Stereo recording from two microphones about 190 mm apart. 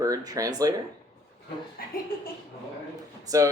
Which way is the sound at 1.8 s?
50° left (ahead or behind).